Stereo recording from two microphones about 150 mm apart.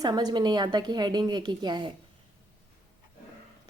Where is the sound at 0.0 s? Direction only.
25° right (ahead or behind).